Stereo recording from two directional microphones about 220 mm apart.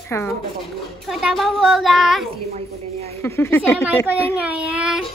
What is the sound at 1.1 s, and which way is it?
A child's voice, centre (ahead or behind).